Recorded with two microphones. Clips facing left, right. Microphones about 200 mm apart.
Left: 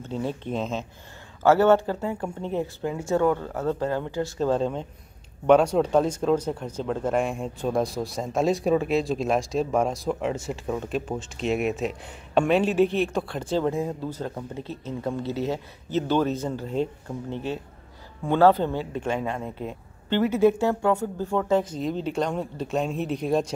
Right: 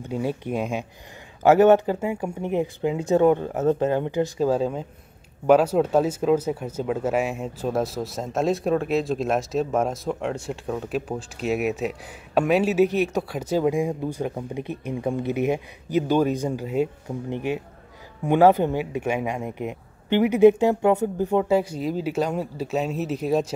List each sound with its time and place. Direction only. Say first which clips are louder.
0.0 s speech: right 3 dB; 10° right (ahead or behind)
4.5 s speech: right 1 dB; 5° right (ahead or behind)